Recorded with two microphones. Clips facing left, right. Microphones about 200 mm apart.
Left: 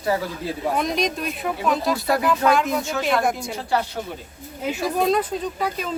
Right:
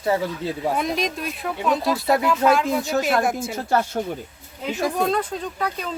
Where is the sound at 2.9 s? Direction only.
45° right (ahead or behind).